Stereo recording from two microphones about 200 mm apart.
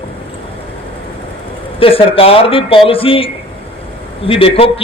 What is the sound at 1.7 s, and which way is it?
Speech, 30° left (ahead or behind).